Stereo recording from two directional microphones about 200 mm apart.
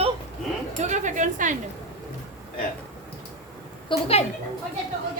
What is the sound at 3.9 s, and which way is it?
Speech, 30° left (ahead or behind).